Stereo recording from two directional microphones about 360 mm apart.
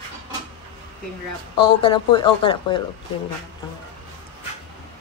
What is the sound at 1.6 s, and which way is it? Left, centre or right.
Speech, centre.